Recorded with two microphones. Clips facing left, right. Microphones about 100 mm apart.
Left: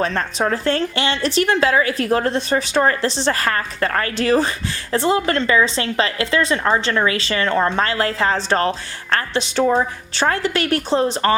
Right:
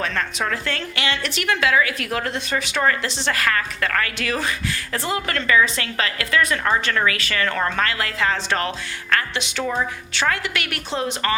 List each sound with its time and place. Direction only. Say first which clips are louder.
0.0 s a woman's voice: left 5 dB; 35° left (ahead or behind)